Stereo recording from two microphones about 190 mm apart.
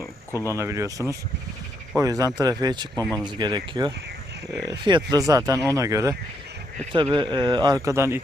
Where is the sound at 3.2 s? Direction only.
25° right (ahead or behind).